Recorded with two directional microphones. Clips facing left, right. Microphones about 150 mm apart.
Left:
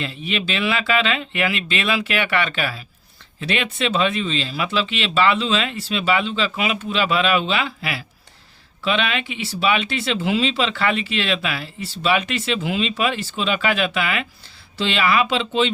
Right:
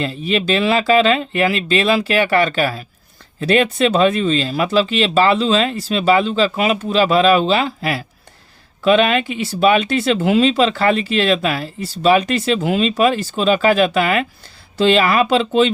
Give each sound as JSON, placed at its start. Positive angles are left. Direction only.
{"t": 0.0, "sound": "speech", "side_deg": -40}